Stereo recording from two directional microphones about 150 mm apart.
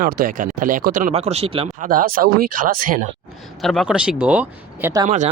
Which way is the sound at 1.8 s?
70° right (ahead or behind).